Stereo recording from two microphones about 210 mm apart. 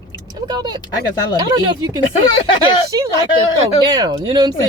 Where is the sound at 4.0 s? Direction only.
20° right (ahead or behind).